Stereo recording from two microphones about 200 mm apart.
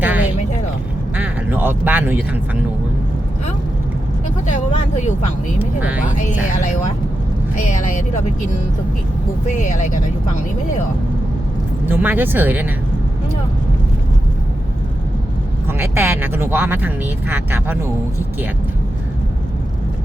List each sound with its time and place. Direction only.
0.0 s a sound: 10° right (ahead or behind)
1.1 s quack: 10° right (ahead or behind)
4.4 s vehicle: 40° left (ahead or behind)
7.5 s speech: 40° left (ahead or behind)
9.5 s speech: 40° left (ahead or behind)
11.9 s speech: 10° right (ahead or behind)
15.6 s speech: 10° right (ahead or behind)